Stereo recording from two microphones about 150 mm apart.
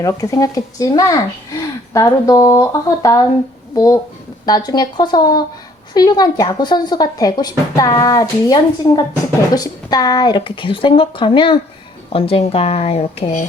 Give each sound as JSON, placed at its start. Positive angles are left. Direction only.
{"t": 0.0, "sound": "speech", "side_deg": 20}